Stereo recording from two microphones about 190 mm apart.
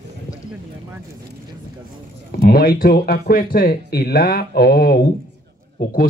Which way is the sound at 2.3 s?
50° left (ahead or behind).